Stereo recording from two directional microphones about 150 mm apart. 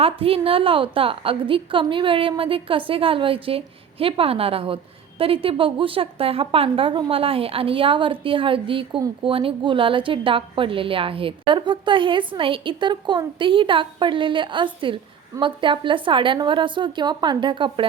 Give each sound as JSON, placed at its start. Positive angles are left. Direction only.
{"t": 0.0, "sound": "a woman's voice", "side_deg": -40}